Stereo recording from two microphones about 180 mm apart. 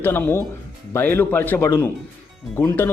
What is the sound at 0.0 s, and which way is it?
Speech, 10° left (ahead or behind).